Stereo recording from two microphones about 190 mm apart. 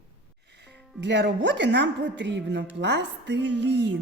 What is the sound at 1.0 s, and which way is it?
Speech, 65° right (ahead or behind).